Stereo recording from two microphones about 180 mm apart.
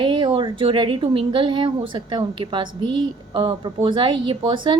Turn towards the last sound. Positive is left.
turn(degrees=-25)  # may be behind; listen again after turning